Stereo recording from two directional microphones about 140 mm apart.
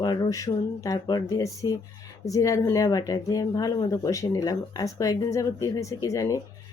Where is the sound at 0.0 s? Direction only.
25° left (ahead or behind).